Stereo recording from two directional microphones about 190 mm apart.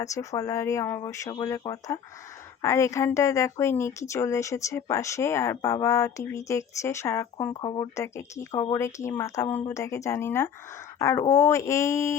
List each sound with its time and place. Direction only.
0.0 s a woman's voice: 15° left (ahead or behind)
7.5 s a woman's voice: 25° left (ahead or behind)